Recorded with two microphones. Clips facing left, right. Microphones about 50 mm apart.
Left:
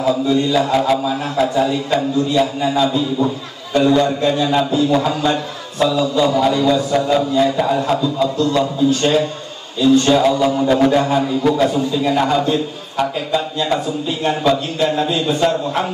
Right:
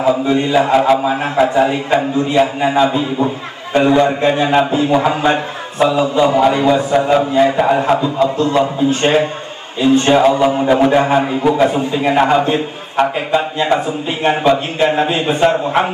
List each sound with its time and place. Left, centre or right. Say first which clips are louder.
0.0 s a man's voice: right 2 dB; right